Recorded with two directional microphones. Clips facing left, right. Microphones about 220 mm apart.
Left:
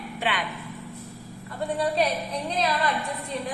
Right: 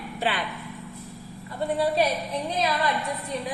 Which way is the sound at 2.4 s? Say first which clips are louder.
Even; 15° right (ahead or behind).